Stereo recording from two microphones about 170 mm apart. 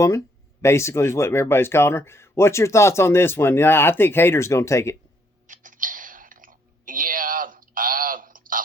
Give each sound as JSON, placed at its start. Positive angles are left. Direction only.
{"t": 0.6, "sound": "speech", "side_deg": 15}
{"t": 5.5, "sound": "clicking", "side_deg": -50}